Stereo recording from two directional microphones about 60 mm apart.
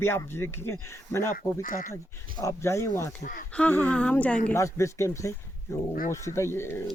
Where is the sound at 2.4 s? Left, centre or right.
Left.